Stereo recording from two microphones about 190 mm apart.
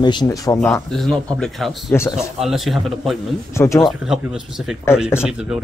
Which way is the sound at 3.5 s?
15° left (ahead or behind).